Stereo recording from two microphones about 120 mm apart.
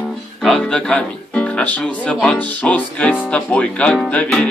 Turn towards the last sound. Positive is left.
turn(degrees=10)  # may be behind; listen again after turning